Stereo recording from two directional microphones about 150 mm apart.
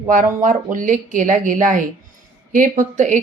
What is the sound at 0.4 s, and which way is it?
A woman's voice, 65° right (ahead or behind).